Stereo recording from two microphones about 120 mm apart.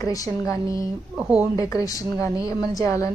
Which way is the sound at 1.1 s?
10° right (ahead or behind).